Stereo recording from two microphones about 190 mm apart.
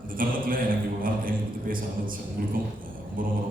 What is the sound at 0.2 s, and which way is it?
Speech, 50° right (ahead or behind).